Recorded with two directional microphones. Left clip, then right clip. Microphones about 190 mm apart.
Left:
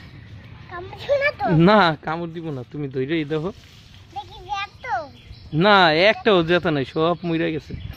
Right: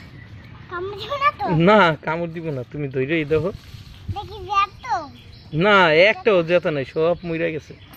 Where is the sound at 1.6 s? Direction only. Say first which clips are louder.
Right 1 dB; 30° left (ahead or behind).